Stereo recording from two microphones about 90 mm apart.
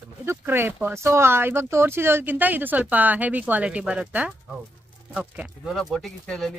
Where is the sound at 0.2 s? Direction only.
25° right (ahead or behind).